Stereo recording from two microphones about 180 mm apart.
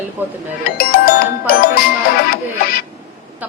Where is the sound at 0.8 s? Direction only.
55° left (ahead or behind).